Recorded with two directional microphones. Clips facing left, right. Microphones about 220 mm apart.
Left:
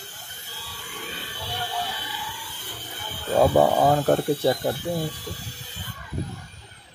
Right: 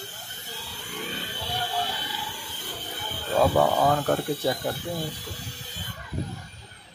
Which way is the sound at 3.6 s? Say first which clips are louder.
Left 3 dB; 30° left (ahead or behind).